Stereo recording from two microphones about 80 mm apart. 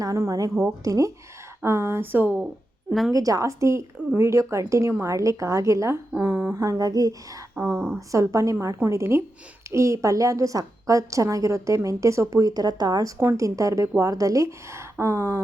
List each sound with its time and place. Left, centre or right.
0.3 s a woman's voice: right
1.6 s a woman's voice: right
3.1 s a woman's voice: right
6.1 s speech: right
6.6 s a woman's voice: right
7.5 s a woman's voice: right
13.3 s a woman's voice: right